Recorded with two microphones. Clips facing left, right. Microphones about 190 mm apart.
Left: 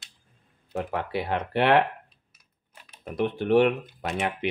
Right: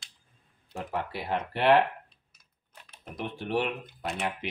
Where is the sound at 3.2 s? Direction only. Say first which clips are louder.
Left 9 dB; 65° left (ahead or behind).